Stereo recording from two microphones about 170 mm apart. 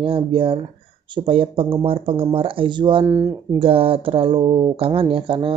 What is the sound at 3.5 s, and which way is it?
Speech, 35° right (ahead or behind).